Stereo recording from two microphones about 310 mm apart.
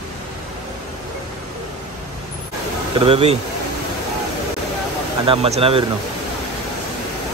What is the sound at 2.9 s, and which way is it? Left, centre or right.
Speech, centre.